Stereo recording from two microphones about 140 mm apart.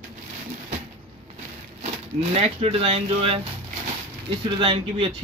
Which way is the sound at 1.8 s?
50° right (ahead or behind).